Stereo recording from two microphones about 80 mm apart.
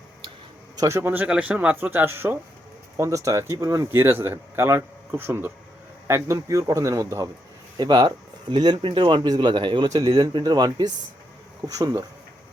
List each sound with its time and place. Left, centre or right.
0.8 s speech: right
1.0 s speech: right
3.0 s speech: right
7.8 s speech: right
9.3 s speech: right
11.7 s speech: right